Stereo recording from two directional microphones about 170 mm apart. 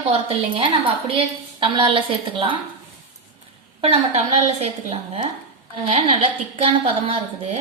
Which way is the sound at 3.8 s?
30° right (ahead or behind).